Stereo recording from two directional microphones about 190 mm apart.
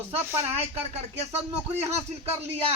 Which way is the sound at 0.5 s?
35° right (ahead or behind).